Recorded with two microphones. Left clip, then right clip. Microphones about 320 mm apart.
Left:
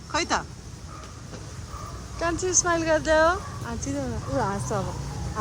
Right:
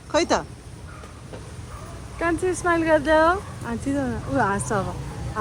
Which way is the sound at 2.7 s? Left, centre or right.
Right.